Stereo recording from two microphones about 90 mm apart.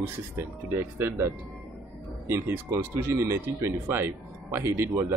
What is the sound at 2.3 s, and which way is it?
Speech, 30° right (ahead or behind).